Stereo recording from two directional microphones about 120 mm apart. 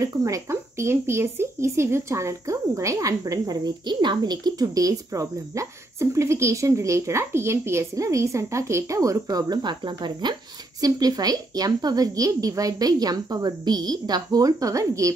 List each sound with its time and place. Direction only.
0.0 s a woman's voice: 25° right (ahead or behind)